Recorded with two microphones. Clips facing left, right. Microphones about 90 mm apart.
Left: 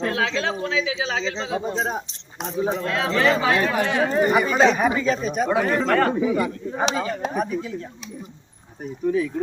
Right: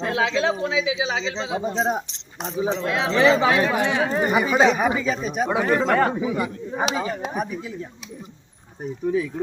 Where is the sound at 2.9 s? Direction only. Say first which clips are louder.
Right 4 dB; 20° right (ahead or behind).